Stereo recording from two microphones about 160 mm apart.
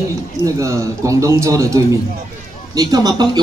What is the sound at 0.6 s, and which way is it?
Speech, 20° right (ahead or behind).